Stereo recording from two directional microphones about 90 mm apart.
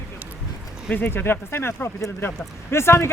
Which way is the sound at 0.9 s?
20° left (ahead or behind).